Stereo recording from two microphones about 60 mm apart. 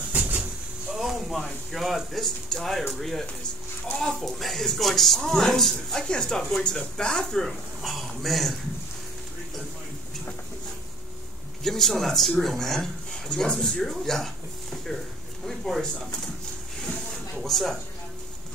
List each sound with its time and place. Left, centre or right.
0.1 s a sound: right
0.9 s speech: centre
11.6 s speech: centre
17.4 s speech: centre